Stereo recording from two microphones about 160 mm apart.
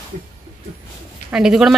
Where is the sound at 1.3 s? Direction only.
5° right (ahead or behind).